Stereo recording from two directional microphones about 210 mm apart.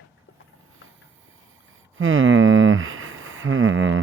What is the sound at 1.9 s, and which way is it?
Speech, 70° right (ahead or behind).